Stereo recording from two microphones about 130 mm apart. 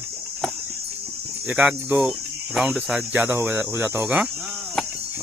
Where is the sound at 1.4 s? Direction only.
10° right (ahead or behind).